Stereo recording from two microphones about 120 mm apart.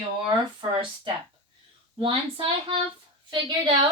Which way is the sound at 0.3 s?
40° right (ahead or behind).